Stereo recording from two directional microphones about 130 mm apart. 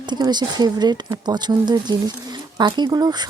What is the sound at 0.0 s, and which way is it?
Speech, 35° right (ahead or behind).